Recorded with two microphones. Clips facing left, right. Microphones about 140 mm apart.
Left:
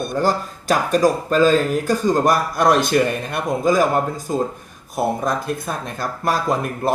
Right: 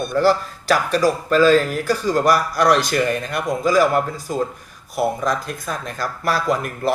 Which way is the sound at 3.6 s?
45° left (ahead or behind).